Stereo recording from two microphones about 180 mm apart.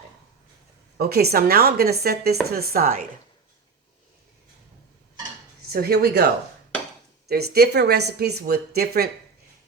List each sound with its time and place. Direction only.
0.9 s speech: 60° right (ahead or behind)
5.7 s speech: 60° right (ahead or behind)